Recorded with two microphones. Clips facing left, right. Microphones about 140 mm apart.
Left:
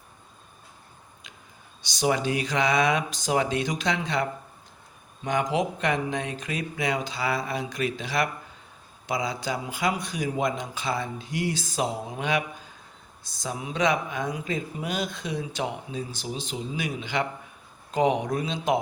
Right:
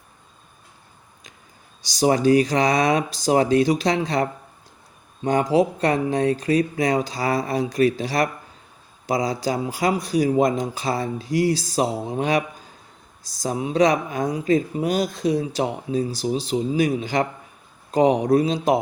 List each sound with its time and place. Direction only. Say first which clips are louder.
1.8 s speech: right 7 dB; 35° right (ahead or behind)